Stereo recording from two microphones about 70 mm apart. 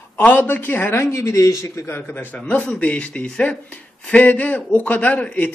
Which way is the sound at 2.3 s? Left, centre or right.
Centre.